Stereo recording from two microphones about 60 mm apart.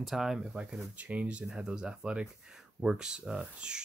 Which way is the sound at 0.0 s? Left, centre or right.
Centre.